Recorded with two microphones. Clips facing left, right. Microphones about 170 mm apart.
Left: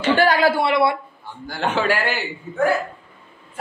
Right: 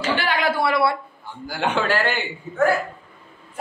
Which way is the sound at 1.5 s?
Centre (ahead or behind).